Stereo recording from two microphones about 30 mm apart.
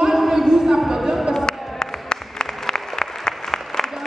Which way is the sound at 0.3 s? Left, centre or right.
Centre.